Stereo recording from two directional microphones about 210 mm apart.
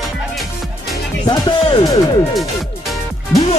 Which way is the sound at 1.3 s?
20° left (ahead or behind).